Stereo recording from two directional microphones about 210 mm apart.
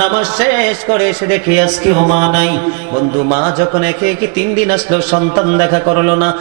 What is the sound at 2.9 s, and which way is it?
A man's voice, 30° right (ahead or behind).